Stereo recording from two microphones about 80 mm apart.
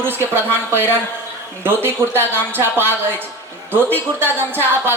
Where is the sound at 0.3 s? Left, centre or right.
Right.